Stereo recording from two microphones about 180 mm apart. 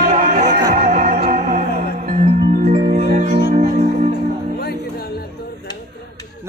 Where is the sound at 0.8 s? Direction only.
55° right (ahead or behind).